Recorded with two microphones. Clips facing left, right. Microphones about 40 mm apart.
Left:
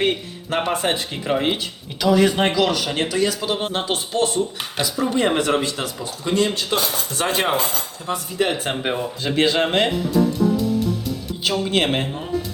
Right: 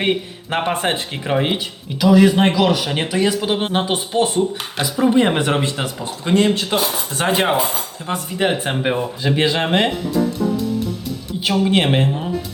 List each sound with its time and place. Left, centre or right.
0.0 s speech: right
1.3 s speech: centre
3.8 s speech: centre; by 6.7 s right
6.7 s speech: centre
8.7 s speech: centre
11.3 s speech: centre